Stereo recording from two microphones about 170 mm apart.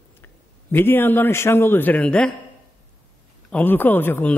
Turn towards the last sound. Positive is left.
turn(degrees=10)  # may be behind; listen again after turning